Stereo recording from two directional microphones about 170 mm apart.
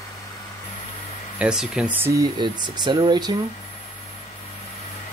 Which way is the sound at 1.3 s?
5° right (ahead or behind).